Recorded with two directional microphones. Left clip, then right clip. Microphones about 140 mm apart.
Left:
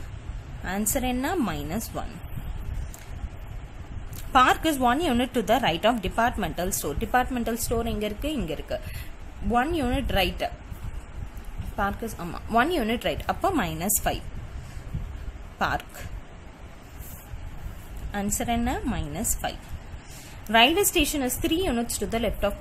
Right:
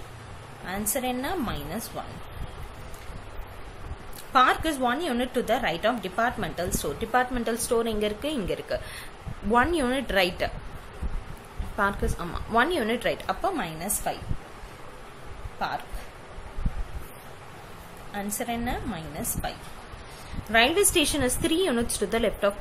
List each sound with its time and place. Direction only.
0.7 s a woman's voice: 50° left (ahead or behind)
4.3 s a woman's voice: 40° left (ahead or behind); by 10.5 s 25° left (ahead or behind)
11.7 s a woman's voice: 25° left (ahead or behind)
13.4 s a woman's voice: 55° left (ahead or behind)
18.1 s a woman's voice: 50° left (ahead or behind)
20.4 s a woman's voice: 35° left (ahead or behind)